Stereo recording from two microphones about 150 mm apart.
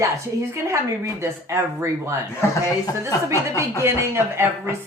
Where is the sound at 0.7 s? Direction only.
20° right (ahead or behind).